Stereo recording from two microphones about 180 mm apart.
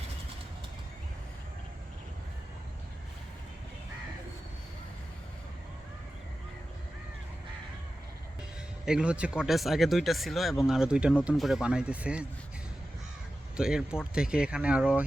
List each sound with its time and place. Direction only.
8.8 s speech: 5° right (ahead or behind)
13.6 s speech: 5° right (ahead or behind)